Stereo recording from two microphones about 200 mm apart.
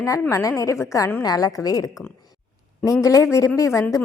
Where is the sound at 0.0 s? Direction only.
15° left (ahead or behind).